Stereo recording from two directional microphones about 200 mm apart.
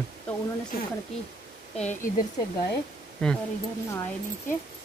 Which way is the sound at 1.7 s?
35° left (ahead or behind).